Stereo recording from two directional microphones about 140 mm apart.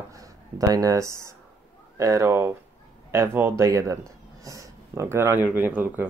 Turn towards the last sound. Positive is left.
turn(degrees=-10)  # may be behind; listen again after turning